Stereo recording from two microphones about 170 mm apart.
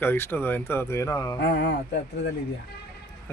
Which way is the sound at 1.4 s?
80° left.